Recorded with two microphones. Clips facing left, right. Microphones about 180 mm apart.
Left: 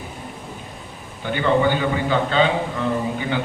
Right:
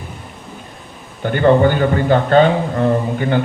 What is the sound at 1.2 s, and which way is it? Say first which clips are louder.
A man's voice: right 6 dB; 50° right (ahead or behind).